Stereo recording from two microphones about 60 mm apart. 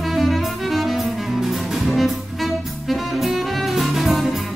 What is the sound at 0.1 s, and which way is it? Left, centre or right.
Music, centre.